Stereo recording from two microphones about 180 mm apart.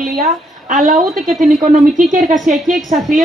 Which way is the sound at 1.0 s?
Centre (ahead or behind).